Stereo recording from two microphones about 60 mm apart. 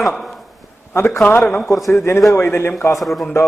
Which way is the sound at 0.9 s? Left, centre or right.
Left.